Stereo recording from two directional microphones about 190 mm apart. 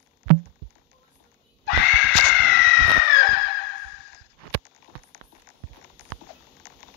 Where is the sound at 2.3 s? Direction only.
60° left (ahead or behind).